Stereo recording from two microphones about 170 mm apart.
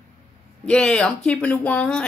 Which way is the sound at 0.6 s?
5° left (ahead or behind).